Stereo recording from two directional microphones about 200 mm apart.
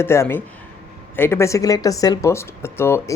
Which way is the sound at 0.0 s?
10° left (ahead or behind).